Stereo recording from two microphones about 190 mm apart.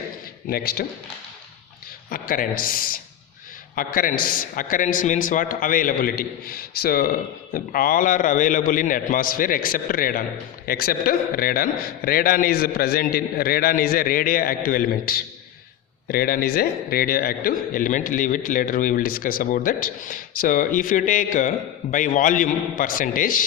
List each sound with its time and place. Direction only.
0.4 s a man's voice: 50° left (ahead or behind)
2.0 s a man's voice: 50° left (ahead or behind)